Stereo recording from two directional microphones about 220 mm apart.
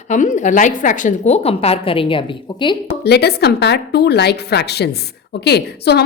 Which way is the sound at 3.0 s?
45° left (ahead or behind).